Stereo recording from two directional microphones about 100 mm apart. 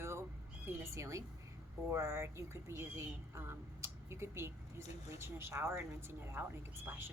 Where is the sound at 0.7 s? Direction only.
30° right (ahead or behind).